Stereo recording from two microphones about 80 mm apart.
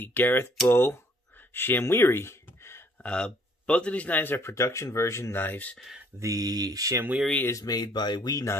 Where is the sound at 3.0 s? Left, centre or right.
Centre.